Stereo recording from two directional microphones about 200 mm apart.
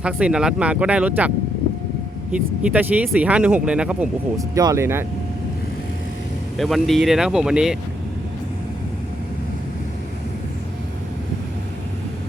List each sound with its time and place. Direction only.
0.0 s speech: 5° right (ahead or behind)
2.3 s speech: 5° right (ahead or behind)
4.4 s speech: 15° right (ahead or behind)
6.6 s speech: centre (ahead or behind)